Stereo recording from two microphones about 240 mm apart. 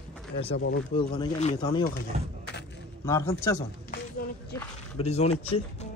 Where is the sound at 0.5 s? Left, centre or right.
Left.